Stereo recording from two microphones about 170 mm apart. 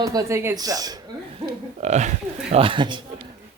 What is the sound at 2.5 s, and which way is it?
Speech, 30° right (ahead or behind).